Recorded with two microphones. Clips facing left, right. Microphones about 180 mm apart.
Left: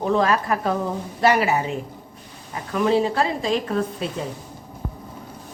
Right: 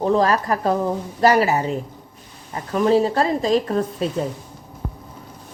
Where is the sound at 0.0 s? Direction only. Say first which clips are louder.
Right 2 dB; 35° right (ahead or behind).